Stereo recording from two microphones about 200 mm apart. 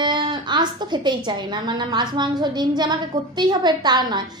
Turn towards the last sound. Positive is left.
turn(degrees=-20)  # may be behind; listen again after turning